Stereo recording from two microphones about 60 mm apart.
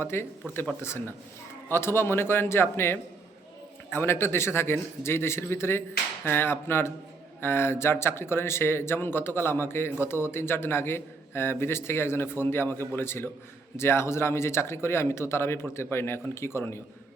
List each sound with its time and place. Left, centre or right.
0.0 s speech: left